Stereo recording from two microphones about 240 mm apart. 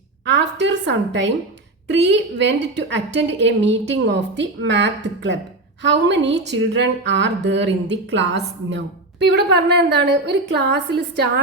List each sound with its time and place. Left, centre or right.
0.3 s a woman's voice: right